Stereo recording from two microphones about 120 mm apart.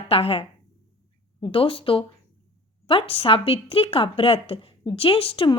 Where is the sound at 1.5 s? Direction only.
45° left (ahead or behind).